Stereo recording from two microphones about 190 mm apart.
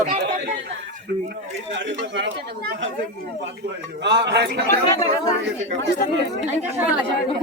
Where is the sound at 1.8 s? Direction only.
70° right (ahead or behind).